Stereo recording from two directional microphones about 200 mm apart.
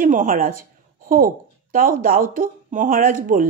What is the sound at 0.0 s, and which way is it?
A woman's voice, 40° right (ahead or behind).